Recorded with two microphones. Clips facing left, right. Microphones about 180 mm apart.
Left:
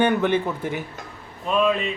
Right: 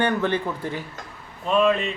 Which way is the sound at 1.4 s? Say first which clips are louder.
Right 1 dB; centre (ahead or behind).